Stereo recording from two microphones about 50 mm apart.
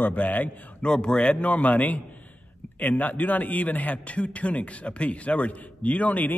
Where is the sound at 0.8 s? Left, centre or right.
Centre.